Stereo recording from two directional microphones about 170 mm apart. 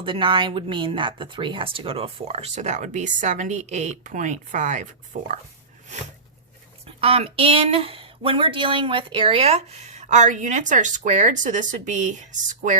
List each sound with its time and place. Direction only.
0.0 s speech: 30° right (ahead or behind); by 5.3 s 50° right (ahead or behind)
6.8 s speech: 35° right (ahead or behind)